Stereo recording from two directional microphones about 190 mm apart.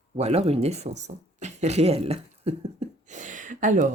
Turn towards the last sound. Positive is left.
turn(degrees=-40)  # may be behind; listen again after turning